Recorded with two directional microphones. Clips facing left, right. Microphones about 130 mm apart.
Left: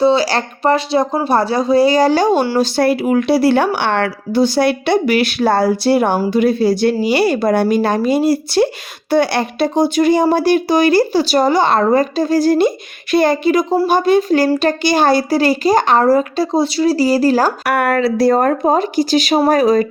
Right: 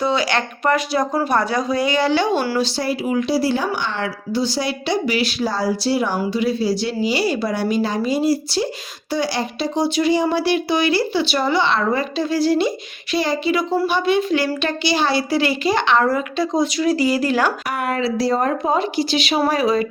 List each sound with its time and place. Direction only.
0.0 s a woman's voice: 30° left (ahead or behind)
2.6 s a woman's voice: 55° left (ahead or behind); by 17.5 s 35° left (ahead or behind)
17.7 s speech: 60° left (ahead or behind); by 19.8 s 45° left (ahead or behind)